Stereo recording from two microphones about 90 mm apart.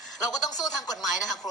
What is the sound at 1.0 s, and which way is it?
Speech, centre (ahead or behind).